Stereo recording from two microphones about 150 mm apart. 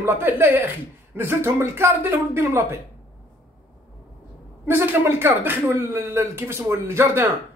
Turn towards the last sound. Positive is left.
turn(degrees=-15)  # may be behind; listen again after turning